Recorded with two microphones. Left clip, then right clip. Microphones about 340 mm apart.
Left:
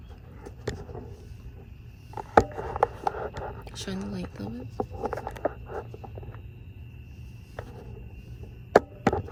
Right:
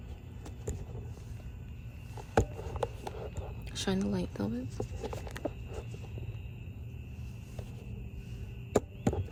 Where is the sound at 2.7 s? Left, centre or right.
Left.